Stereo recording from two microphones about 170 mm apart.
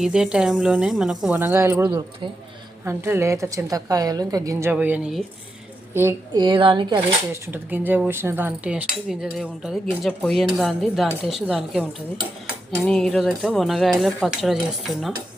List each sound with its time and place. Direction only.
0.0 s a woman's voice: 5° right (ahead or behind); by 4.7 s 20° right (ahead or behind)
4.7 s a woman's voice: 10° right (ahead or behind)
6.3 s a woman's voice: 30° right (ahead or behind)
7.4 s speech: 10° right (ahead or behind)